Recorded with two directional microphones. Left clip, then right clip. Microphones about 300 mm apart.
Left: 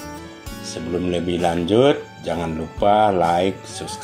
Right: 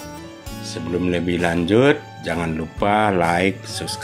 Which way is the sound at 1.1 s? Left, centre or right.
Centre.